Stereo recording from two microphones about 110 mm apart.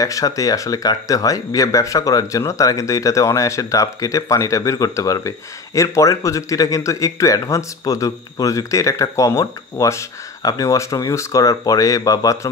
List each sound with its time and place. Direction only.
0.0 s speech: 30° left (ahead or behind)